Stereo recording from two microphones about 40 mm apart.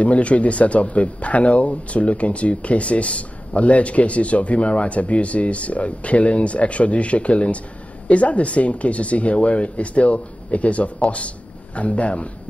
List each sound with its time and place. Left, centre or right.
0.0 s speech: left